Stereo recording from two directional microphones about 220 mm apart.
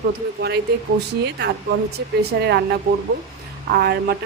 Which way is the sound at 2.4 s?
50° right (ahead or behind).